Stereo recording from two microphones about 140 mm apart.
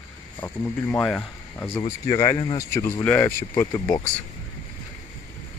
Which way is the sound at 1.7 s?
30° left (ahead or behind).